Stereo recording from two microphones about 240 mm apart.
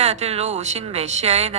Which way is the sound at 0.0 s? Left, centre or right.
Right.